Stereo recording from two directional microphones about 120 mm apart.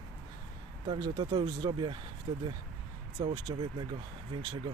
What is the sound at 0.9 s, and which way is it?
Speech, 40° right (ahead or behind).